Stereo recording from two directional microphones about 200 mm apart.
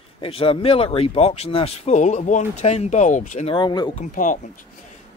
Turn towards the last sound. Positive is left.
turn(degrees=40)  # may be behind; listen again after turning